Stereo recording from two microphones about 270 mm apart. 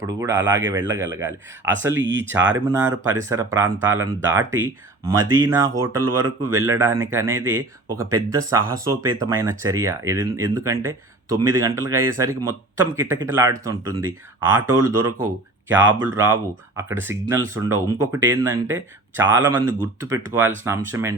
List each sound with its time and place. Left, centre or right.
0.1 s speech: centre
1.3 s speech: right
2.7 s speech: centre